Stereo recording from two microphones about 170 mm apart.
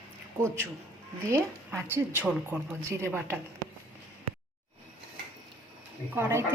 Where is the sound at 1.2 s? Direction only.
15° right (ahead or behind).